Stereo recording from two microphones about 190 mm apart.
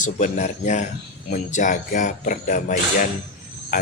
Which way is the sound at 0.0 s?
40° left (ahead or behind).